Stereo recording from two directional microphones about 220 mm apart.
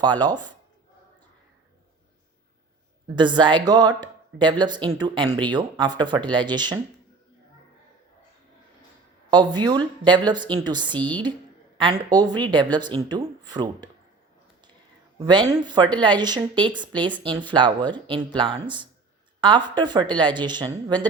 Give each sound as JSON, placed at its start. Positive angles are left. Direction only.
{"t": 0.0, "sound": "speech", "side_deg": -20}
{"t": 3.2, "sound": "speech", "side_deg": -20}
{"t": 9.3, "sound": "speech", "side_deg": -20}
{"t": 15.2, "sound": "speech", "side_deg": -20}